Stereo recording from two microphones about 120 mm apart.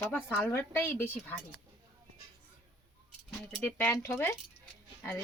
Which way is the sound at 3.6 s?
20° left (ahead or behind).